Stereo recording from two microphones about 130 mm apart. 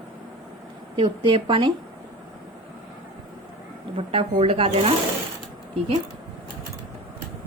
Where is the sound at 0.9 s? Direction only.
45° right (ahead or behind).